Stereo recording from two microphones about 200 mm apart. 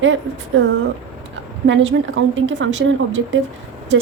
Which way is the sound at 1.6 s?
70° right (ahead or behind).